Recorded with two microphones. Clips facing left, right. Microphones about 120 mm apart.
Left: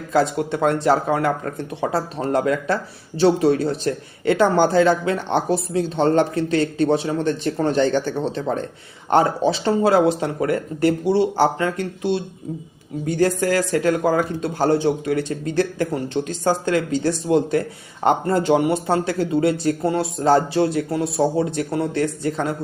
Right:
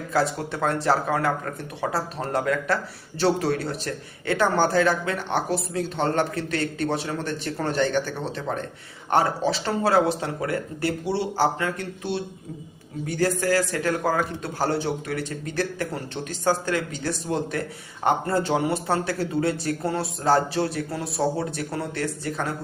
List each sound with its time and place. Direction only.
0.1 s speech: 20° left (ahead or behind)